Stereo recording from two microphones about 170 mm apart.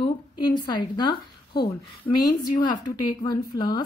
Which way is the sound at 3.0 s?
25° left (ahead or behind).